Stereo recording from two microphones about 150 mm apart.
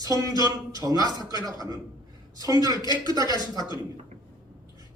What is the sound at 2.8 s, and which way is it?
Speech, 30° left (ahead or behind).